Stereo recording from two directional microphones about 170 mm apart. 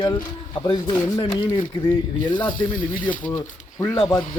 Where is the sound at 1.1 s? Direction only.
25° left (ahead or behind).